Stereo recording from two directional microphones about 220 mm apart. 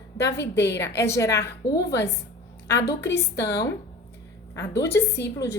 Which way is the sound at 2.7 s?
50° left (ahead or behind).